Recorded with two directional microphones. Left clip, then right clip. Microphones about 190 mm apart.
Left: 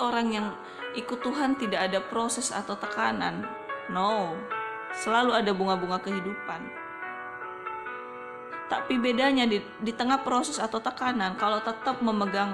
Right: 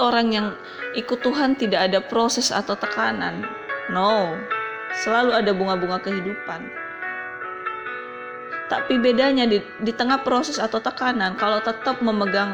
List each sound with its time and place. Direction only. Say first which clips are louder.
0.0 s speech: right 8 dB; 20° right (ahead or behind)
4.9 s speech: right 5 dB; centre (ahead or behind)
5.7 s speech: right 5 dB; 15° right (ahead or behind)
8.7 s speech: right 8 dB; 10° right (ahead or behind)